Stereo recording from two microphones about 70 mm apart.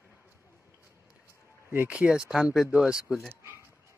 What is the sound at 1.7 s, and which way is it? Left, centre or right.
Speech, right.